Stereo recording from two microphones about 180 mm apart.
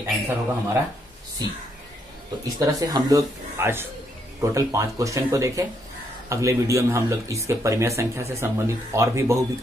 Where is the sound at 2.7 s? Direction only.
20° right (ahead or behind).